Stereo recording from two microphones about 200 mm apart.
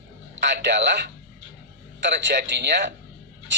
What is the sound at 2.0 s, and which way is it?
Speech, 55° right (ahead or behind).